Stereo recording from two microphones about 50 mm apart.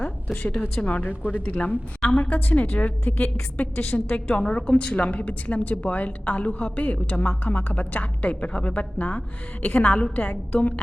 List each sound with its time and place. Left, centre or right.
0.8 s a woman's voice: left